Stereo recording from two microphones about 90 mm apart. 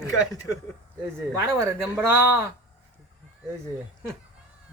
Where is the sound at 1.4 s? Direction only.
30° right (ahead or behind).